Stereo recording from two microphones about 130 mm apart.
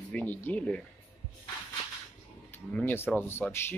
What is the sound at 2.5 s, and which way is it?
Speech, 15° left (ahead or behind).